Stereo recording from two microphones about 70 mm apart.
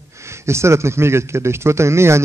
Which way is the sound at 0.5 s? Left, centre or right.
Right.